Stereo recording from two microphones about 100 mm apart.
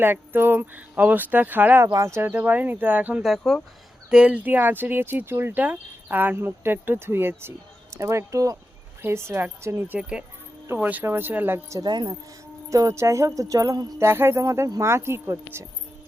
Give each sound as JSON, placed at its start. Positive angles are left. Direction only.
{"t": 0.0, "sound": "speech", "side_deg": -20}
{"t": 1.9, "sound": "a sound", "side_deg": -30}
{"t": 2.2, "sound": "speech", "side_deg": -20}
{"t": 3.2, "sound": "speech", "side_deg": 0}
{"t": 4.1, "sound": "speech", "side_deg": -15}
{"t": 7.9, "sound": "a sound", "side_deg": -30}
{"t": 9.0, "sound": "speech", "side_deg": -25}
{"t": 10.0, "sound": "speech", "side_deg": -10}
{"t": 11.8, "sound": "speech", "side_deg": -45}
{"t": 12.7, "sound": "a sound", "side_deg": -30}
{"t": 14.0, "sound": "speech", "side_deg": -25}